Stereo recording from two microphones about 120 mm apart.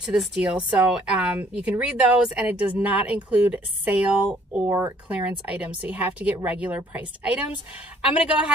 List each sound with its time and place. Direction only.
0.0 s speech: 5° right (ahead or behind)
4.6 s speech: 25° right (ahead or behind)
5.1 s speech: 10° right (ahead or behind)